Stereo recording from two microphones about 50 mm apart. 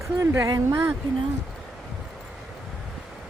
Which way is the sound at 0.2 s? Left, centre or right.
Right.